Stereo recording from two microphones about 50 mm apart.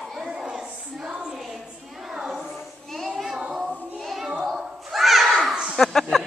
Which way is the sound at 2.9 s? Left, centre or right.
Centre.